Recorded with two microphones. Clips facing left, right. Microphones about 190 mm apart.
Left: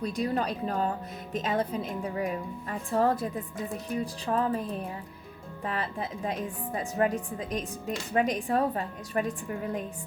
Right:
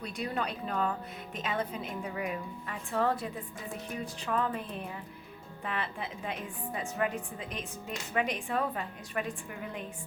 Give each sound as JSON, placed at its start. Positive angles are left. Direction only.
{"t": 0.0, "sound": "a woman's voice", "side_deg": 40}